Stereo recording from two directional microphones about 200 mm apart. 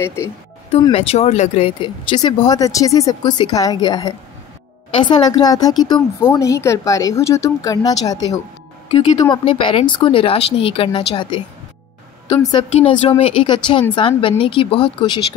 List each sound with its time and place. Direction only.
0.0 s a woman's voice: 15° left (ahead or behind)
0.9 s a woman's voice: 30° left (ahead or behind)